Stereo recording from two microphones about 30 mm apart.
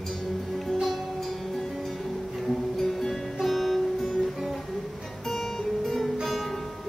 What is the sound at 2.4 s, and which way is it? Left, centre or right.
Music, centre.